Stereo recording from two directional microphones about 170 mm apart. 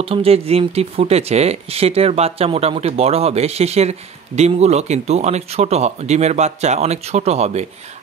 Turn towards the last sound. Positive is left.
turn(degrees=-40)  # may be behind; listen again after turning